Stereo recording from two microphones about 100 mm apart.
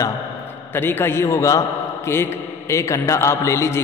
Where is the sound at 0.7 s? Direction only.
20° left (ahead or behind).